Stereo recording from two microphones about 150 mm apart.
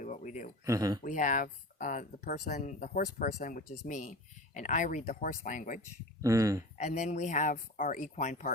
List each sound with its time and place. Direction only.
0.0 s a sound: 60° left (ahead or behind)
0.6 s speech: 20° right (ahead or behind)
1.0 s speech: 60° left (ahead or behind)
6.2 s speech: 20° right (ahead or behind)
6.7 s speech: 50° left (ahead or behind)